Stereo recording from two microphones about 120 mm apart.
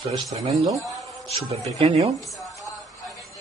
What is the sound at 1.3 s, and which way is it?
Speech, 60° right (ahead or behind).